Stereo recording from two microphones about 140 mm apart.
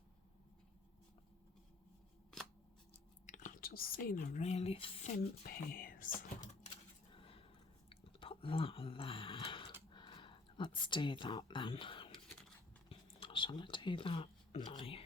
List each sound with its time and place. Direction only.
3.2 s speech: 65° left (ahead or behind); by 4.9 s 40° left (ahead or behind)
5.0 s speech: 80° left
7.1 s a sound: 40° left (ahead or behind)
10.8 s speech: 35° left (ahead or behind)